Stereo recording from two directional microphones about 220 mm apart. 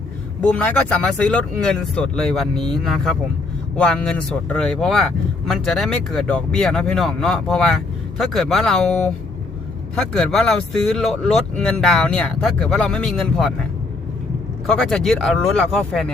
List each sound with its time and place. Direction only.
0.4 s speech: 5° left (ahead or behind)
14.7 s speech: 5° left (ahead or behind)